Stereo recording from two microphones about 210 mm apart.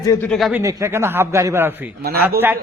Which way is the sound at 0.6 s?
15° right (ahead or behind).